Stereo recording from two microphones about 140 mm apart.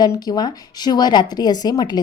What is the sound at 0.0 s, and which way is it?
Speech, 30° left (ahead or behind).